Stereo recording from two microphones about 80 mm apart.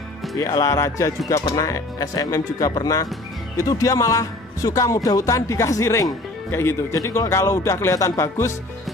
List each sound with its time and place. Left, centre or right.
0.4 s a man's voice: left